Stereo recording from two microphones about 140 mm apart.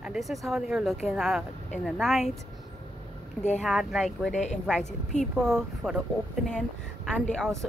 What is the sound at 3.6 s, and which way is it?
Speech, centre (ahead or behind).